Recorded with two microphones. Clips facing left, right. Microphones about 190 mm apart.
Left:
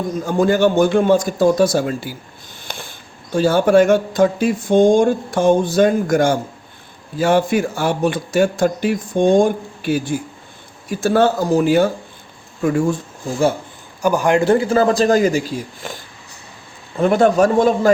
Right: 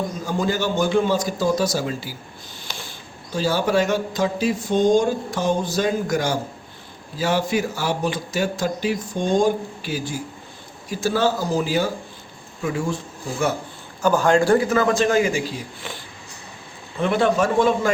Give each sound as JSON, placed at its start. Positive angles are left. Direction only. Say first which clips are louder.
{"t": 0.3, "sound": "a man's voice", "louder": "left 9 dB", "side_deg": 55}
{"t": 2.6, "sound": "a sound", "louder": "left 4 dB", "side_deg": 55}
{"t": 3.3, "sound": "a man's voice", "louder": "left 7 dB", "side_deg": 55}
{"t": 14.0, "sound": "a man's voice", "louder": "left 2 dB", "side_deg": 15}
{"t": 17.0, "sound": "speech", "louder": "left 6 dB", "side_deg": 45}